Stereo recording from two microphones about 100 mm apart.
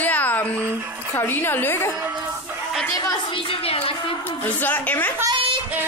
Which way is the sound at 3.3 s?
65° left (ahead or behind).